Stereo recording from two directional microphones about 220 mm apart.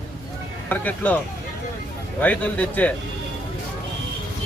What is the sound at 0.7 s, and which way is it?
Speech, 10° left (ahead or behind).